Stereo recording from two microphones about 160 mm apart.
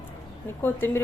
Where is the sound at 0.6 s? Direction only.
15° left (ahead or behind).